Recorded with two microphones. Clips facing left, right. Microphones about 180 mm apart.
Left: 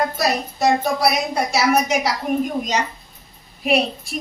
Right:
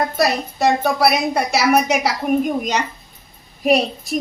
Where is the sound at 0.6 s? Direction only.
60° right (ahead or behind).